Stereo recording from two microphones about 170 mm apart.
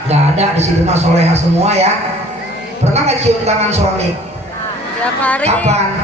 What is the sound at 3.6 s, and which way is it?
Speech, 40° right (ahead or behind).